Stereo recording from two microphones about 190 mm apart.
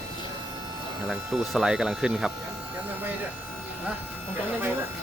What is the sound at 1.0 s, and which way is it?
Speech, 5° right (ahead or behind).